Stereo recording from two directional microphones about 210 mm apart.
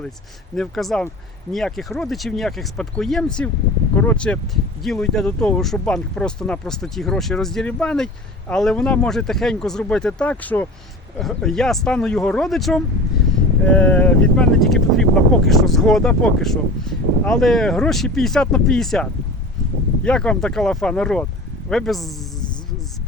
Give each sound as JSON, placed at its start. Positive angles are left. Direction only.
{"t": 0.5, "sound": "speech", "side_deg": 0}
{"t": 20.1, "sound": "speech", "side_deg": 5}